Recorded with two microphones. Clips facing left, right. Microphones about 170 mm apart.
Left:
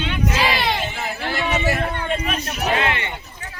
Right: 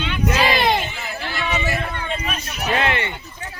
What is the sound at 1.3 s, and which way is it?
Chatter, 40° left (ahead or behind).